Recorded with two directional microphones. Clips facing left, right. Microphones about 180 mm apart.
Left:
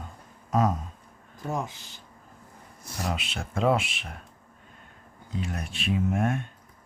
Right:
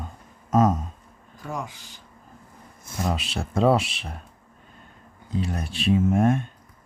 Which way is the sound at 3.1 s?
35° right (ahead or behind).